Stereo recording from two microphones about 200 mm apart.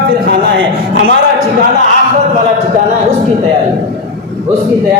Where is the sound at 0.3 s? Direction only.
55° right (ahead or behind).